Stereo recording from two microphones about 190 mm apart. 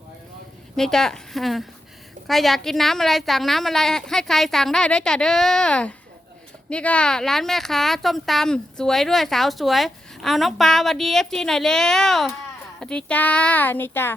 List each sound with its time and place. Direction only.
0.8 s a woman's voice: centre (ahead or behind)